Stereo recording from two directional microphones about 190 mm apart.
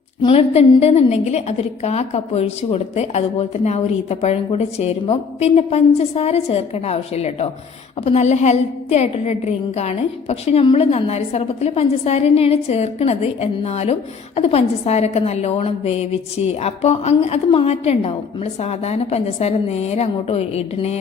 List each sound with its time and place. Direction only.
0.2 s a woman's voice: 30° left (ahead or behind)